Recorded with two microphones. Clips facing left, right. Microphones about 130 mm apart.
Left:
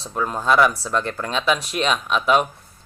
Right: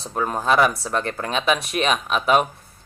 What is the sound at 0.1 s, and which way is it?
Speech, 40° right (ahead or behind).